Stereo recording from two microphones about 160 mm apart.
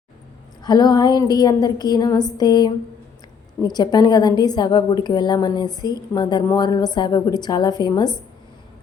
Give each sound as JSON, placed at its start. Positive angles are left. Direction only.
{"t": 0.6, "sound": "a woman's voice", "side_deg": 25}